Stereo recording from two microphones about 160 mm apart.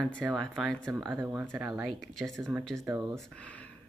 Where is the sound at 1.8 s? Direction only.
Centre (ahead or behind).